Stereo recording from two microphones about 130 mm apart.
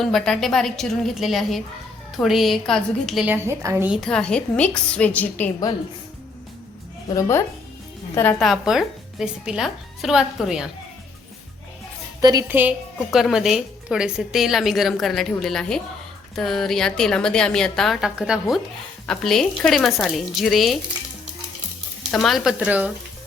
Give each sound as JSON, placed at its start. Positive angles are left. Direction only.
{"t": 0.0, "sound": "a woman's voice", "side_deg": 5}
{"t": 3.2, "sound": "a woman's voice", "side_deg": -15}
{"t": 4.0, "sound": "a woman's voice", "side_deg": 5}
{"t": 7.1, "sound": "a woman's voice", "side_deg": 25}
{"t": 8.4, "sound": "a woman's voice", "side_deg": 0}
{"t": 12.2, "sound": "a woman's voice", "side_deg": -30}
{"t": 12.5, "sound": "a woman's voice", "side_deg": -15}
{"t": 13.1, "sound": "a woman's voice", "side_deg": 0}
{"t": 22.1, "sound": "a woman's voice", "side_deg": 0}